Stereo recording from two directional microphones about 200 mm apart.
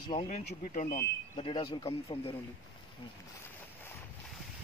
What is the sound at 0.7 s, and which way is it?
Speech, 40° left (ahead or behind).